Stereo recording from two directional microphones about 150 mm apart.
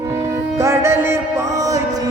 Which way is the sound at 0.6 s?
15° right (ahead or behind).